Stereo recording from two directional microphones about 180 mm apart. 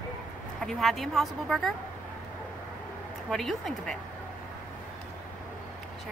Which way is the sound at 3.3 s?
Centre (ahead or behind).